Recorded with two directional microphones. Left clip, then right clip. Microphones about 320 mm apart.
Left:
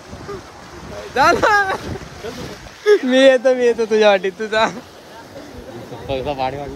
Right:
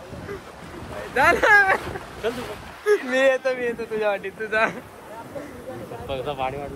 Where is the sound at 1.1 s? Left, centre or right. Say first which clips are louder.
Left 3 dB; centre.